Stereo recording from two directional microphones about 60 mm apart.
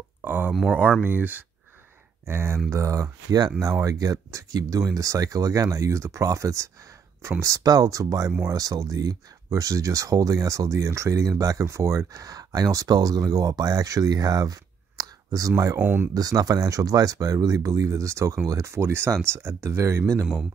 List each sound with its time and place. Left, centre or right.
0.2 s a sound: right
1.0 s speech: right
2.2 s speech: right
2.7 s speech: right
11.6 s speech: right
15.8 s speech: right
16.1 s speech: right